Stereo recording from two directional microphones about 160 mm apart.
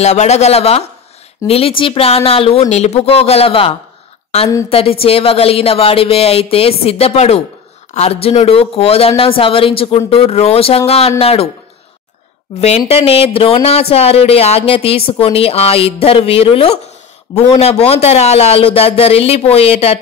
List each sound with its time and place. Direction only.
0.0 s speech: 45° left (ahead or behind)
12.5 s speech: 40° left (ahead or behind)